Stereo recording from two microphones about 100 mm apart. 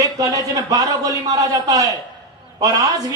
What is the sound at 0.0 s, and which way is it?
A man's voice, 35° right (ahead or behind).